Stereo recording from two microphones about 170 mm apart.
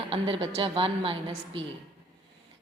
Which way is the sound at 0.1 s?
30° right (ahead or behind).